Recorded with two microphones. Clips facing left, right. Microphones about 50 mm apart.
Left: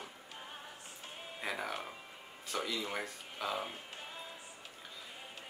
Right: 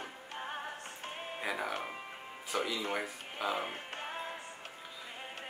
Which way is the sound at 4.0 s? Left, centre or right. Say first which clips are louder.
Right 7 dB; right.